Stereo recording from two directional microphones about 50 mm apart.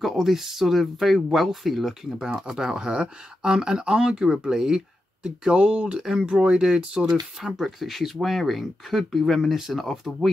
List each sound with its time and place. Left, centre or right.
0.0 s speech: centre